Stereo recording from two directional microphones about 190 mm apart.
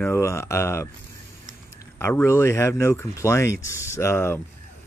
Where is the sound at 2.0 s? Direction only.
10° left (ahead or behind).